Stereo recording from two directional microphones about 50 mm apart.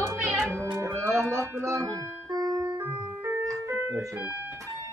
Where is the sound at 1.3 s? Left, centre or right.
Right.